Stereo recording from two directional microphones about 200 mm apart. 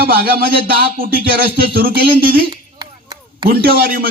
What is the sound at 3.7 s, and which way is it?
Speech, 45° right (ahead or behind).